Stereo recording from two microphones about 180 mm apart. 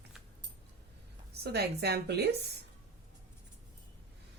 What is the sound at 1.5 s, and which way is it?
Speech, 65° right (ahead or behind).